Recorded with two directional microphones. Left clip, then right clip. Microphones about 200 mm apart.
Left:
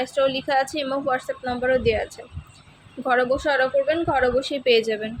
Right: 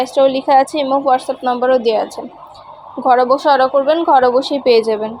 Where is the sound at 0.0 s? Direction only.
10° right (ahead or behind).